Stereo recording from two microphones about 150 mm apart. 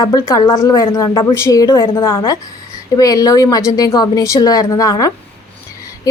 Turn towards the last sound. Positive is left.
turn(degrees=25)  # may be behind; listen again after turning